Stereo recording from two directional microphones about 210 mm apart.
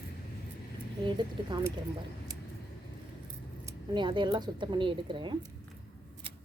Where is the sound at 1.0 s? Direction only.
20° right (ahead or behind).